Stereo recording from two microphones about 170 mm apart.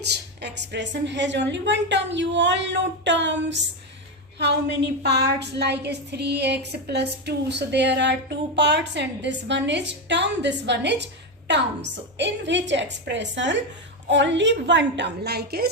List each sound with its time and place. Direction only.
0.0 s a woman's voice: 75° right (ahead or behind)